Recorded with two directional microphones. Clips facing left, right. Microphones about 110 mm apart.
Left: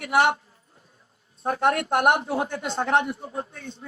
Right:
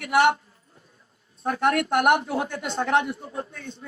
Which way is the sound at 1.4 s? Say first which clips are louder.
Even; 30° left (ahead or behind).